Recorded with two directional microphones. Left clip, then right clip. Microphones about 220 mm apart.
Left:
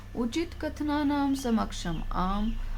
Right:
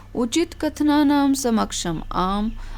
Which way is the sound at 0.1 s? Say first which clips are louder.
Right 9 dB; 50° right (ahead or behind).